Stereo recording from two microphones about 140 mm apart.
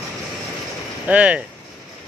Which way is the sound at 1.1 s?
10° right (ahead or behind).